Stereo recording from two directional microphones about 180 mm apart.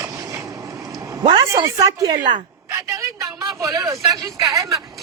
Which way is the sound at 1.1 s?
25° right (ahead or behind).